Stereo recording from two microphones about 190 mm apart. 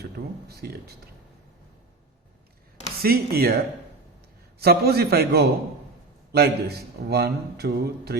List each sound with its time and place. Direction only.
0.0 s a man's voice: 55° right (ahead or behind)
3.0 s speech: 55° right (ahead or behind)
4.6 s a man's voice: 55° right (ahead or behind)